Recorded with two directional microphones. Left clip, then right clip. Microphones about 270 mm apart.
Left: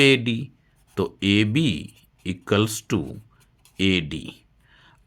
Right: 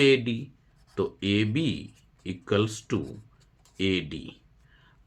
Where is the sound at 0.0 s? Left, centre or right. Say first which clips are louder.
Left 4 dB; left.